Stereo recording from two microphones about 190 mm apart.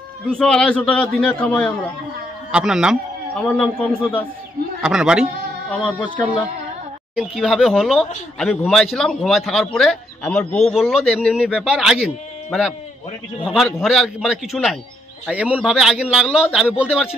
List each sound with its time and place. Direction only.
0.3 s a man's voice: 5° left (ahead or behind)
2.5 s a man's voice: 5° right (ahead or behind)
4.8 s a man's voice: 5° right (ahead or behind)
7.2 s a man's voice: centre (ahead or behind)